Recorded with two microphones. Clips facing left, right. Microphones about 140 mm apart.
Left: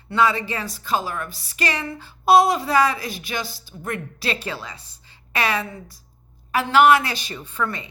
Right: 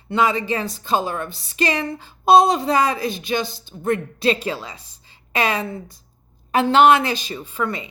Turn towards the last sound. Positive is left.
turn(degrees=-15)  # may be behind; listen again after turning